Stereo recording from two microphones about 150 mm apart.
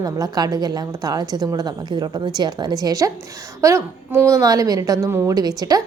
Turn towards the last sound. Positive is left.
turn(degrees=-25)  # may be behind; listen again after turning